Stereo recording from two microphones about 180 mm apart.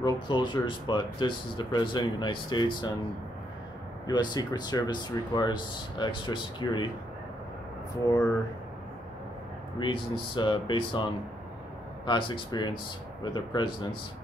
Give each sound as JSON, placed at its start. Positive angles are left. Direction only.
{"t": 0.0, "sound": "speech", "side_deg": 25}
{"t": 4.1, "sound": "speech", "side_deg": 25}
{"t": 9.8, "sound": "speech", "side_deg": 25}
{"t": 12.1, "sound": "speech", "side_deg": 25}